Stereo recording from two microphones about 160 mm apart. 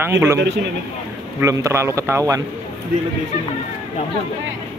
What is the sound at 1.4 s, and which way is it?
A man's voice, 20° right (ahead or behind).